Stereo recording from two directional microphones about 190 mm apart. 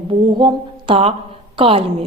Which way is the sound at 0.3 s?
25° right (ahead or behind).